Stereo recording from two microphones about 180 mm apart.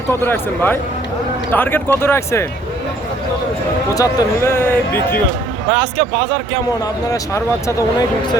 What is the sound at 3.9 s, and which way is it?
Speech, 15° left (ahead or behind).